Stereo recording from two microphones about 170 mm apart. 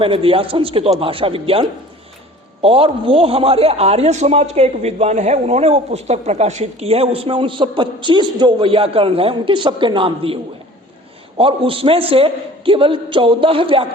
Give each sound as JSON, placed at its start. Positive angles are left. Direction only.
{"t": 0.0, "sound": "a man's voice", "side_deg": -30}
{"t": 11.3, "sound": "a man's voice", "side_deg": -30}